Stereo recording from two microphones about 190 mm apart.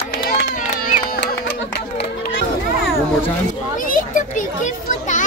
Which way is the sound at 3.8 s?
45° left (ahead or behind).